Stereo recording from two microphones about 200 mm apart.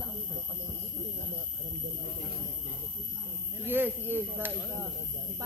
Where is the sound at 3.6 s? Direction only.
10° right (ahead or behind).